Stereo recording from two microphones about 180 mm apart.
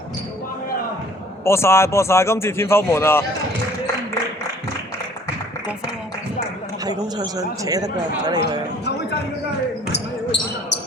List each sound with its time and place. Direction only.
1.5 s speech: 15° left (ahead or behind)
6.8 s speech: 20° right (ahead or behind)
8.8 s a sound: 70° left (ahead or behind)